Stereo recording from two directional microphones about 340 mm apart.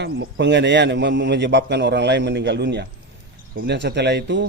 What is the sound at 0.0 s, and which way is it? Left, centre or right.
A man's voice, right.